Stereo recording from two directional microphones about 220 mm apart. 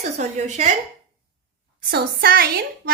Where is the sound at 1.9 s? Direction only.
45° right (ahead or behind).